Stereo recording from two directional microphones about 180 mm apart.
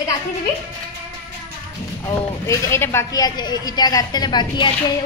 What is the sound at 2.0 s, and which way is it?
A woman's voice, 15° left (ahead or behind).